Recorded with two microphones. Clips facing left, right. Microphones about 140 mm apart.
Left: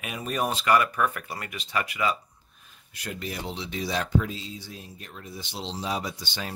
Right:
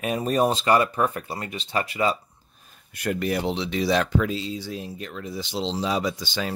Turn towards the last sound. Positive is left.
turn(degrees=-90)